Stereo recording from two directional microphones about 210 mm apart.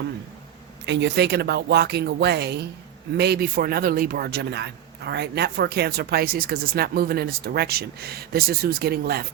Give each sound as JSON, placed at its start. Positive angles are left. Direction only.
{"t": 0.9, "sound": "speech", "side_deg": -55}